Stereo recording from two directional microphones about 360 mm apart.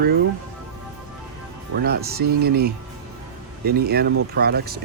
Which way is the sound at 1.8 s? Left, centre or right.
Right.